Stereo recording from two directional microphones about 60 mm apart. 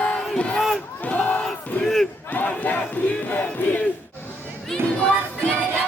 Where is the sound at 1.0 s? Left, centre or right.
Left.